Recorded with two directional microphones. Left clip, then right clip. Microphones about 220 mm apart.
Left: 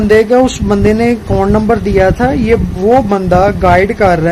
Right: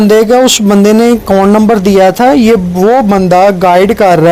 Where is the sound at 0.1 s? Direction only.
30° right (ahead or behind).